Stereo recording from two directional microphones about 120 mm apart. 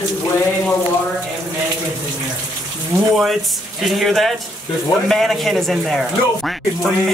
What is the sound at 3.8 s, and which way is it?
A man's voice, centre (ahead or behind).